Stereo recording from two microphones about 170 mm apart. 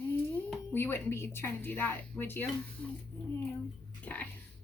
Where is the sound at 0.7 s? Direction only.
15° left (ahead or behind).